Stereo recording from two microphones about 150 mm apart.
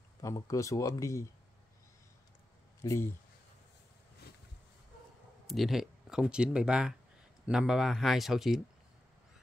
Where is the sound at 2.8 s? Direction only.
15° left (ahead or behind).